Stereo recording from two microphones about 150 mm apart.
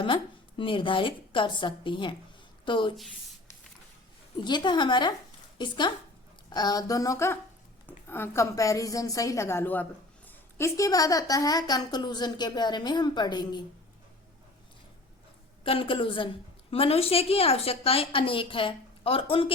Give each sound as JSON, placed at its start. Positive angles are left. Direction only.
{"t": 0.0, "sound": "a woman's voice", "side_deg": 35}
{"t": 2.9, "sound": "speech", "side_deg": 0}
{"t": 4.4, "sound": "a woman's voice", "side_deg": 30}
{"t": 15.6, "sound": "a woman's voice", "side_deg": 35}